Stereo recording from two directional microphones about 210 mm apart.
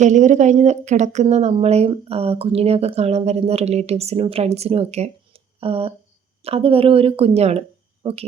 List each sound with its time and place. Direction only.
0.0 s a woman's voice: 35° right (ahead or behind)